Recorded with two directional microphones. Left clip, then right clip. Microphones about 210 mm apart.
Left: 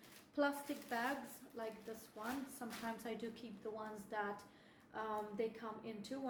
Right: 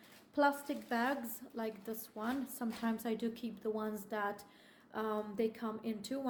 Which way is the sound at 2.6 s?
50° right (ahead or behind).